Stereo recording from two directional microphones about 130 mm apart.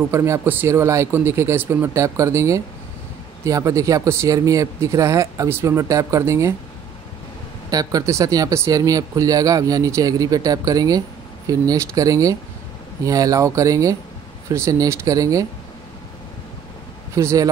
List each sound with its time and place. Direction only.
0.1 s speech: 20° right (ahead or behind)
7.7 s speech: 25° right (ahead or behind)
17.1 s speech: 25° right (ahead or behind)